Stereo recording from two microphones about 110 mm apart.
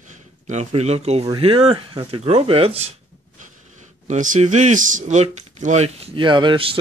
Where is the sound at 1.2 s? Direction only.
55° right (ahead or behind).